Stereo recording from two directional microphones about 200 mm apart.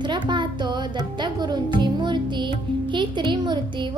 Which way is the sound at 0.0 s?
25° right (ahead or behind).